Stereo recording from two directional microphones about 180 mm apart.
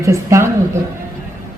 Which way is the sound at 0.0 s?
15° right (ahead or behind).